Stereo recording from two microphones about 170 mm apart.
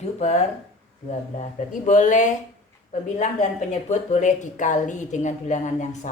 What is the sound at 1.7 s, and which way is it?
A woman's voice, 45° left (ahead or behind).